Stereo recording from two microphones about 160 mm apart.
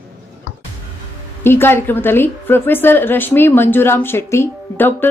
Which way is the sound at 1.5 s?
15° left (ahead or behind).